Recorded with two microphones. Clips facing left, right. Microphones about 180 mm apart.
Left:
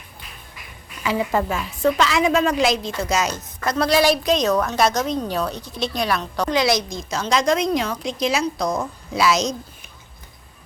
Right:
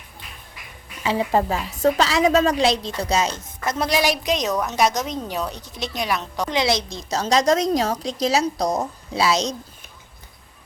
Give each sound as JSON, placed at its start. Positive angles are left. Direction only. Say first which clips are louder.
{"t": 1.0, "sound": "a woman's voice", "louder": "right 1 dB", "side_deg": -30}